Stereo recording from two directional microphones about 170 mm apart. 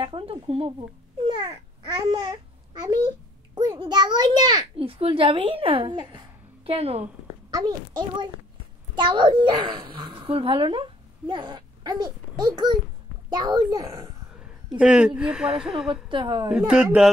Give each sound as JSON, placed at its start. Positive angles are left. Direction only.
{"t": 0.0, "sound": "a child's voice", "side_deg": -30}
{"t": 7.5, "sound": "a child's voice", "side_deg": -25}
{"t": 14.8, "sound": "speech", "side_deg": -5}
{"t": 15.9, "sound": "a child's voice", "side_deg": -30}
{"t": 16.4, "sound": "speech", "side_deg": -5}